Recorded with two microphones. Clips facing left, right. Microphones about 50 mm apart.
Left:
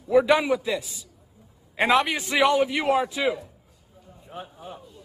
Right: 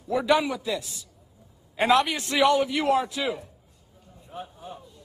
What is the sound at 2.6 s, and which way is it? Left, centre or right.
Speech, left.